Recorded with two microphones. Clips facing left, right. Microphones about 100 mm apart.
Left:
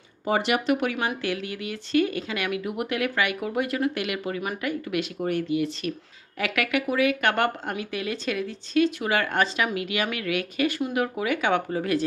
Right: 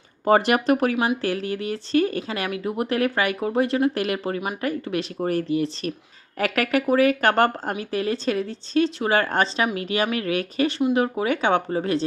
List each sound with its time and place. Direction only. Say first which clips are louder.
0.3 s speech: right 5 dB; 45° right (ahead or behind)